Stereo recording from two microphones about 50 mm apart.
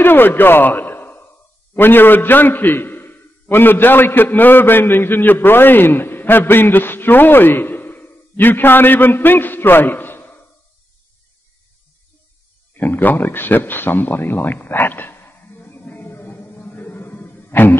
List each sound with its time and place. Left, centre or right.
0.0 s a man's voice: left
12.7 s speech: left
16.3 s a sound: left